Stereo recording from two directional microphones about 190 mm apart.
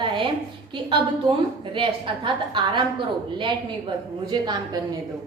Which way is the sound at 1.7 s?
25° right (ahead or behind).